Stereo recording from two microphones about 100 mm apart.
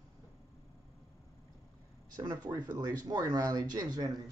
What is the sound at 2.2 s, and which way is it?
Speech, 40° right (ahead or behind).